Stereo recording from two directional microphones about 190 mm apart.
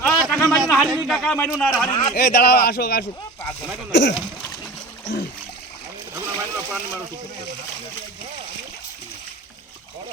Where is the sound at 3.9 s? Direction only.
70° left (ahead or behind).